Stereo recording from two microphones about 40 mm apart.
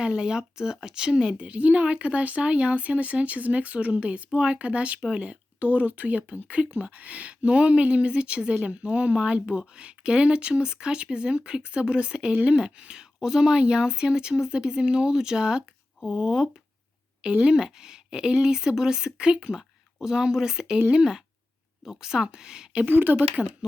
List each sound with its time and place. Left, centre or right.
0.0 s speech: right
1.5 s speech: right; by 22.7 s centre
22.9 s speech: right
23.4 s speech: right